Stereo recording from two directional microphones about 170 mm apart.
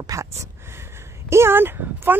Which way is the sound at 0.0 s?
20° right (ahead or behind).